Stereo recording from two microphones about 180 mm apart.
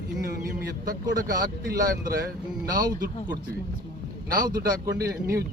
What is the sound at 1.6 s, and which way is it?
Speech, 60° right (ahead or behind).